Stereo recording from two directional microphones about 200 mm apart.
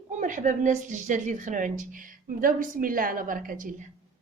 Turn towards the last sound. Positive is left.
turn(degrees=-45)  # may be behind; listen again after turning